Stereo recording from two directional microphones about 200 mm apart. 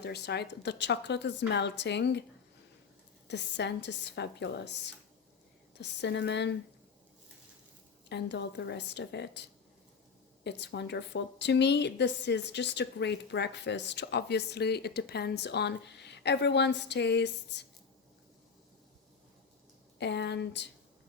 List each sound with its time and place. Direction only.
0.0 s a woman's voice: 55° left (ahead or behind)
3.2 s a woman's voice: 60° left (ahead or behind)
5.8 s a woman's voice: 60° left (ahead or behind)
8.1 s a woman's voice: 60° left (ahead or behind)
10.4 s a woman's voice: 60° left (ahead or behind)
20.0 s a woman's voice: 60° left (ahead or behind)